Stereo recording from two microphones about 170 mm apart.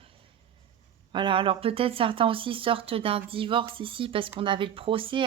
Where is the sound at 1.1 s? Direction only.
30° right (ahead or behind).